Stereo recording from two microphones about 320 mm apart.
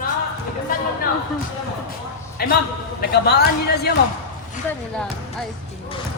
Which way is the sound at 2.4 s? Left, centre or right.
Left.